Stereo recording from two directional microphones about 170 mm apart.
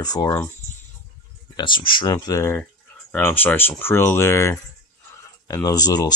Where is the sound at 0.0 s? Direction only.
20° left (ahead or behind).